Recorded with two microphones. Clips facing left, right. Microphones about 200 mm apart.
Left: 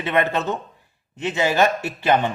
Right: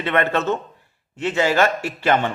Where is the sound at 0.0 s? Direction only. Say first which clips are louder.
Right 1 dB; 15° left (ahead or behind).